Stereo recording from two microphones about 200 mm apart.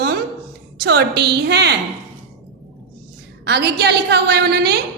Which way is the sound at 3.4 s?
55° right (ahead or behind).